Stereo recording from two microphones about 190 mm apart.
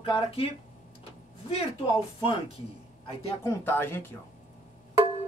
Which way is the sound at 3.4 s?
10° left (ahead or behind).